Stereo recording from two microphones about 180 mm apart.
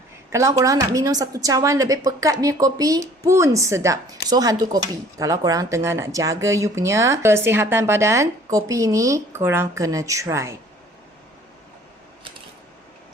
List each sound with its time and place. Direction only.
0.3 s a woman's voice: 15° right (ahead or behind)